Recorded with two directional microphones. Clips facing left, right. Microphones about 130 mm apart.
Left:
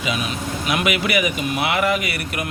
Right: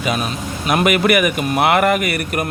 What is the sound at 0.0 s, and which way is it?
A man's voice, 45° right (ahead or behind).